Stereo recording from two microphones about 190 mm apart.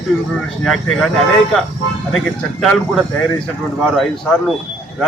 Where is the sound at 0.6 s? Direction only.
Centre (ahead or behind).